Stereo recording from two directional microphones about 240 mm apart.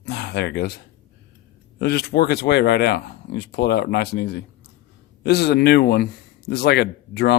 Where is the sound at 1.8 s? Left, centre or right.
Left.